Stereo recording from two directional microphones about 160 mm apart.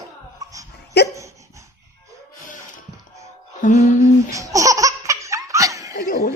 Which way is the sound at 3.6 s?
50° left (ahead or behind).